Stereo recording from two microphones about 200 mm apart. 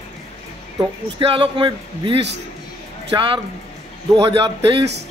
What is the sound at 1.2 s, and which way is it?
A man's voice, 25° right (ahead or behind).